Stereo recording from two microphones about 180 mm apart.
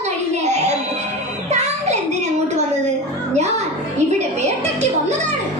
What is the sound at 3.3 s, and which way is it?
Children playing, 40° right (ahead or behind).